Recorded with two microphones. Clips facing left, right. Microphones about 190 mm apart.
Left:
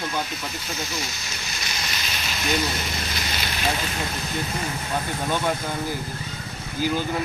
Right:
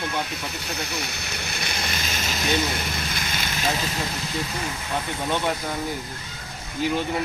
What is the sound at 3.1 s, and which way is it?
Vehicle, 50° right (ahead or behind).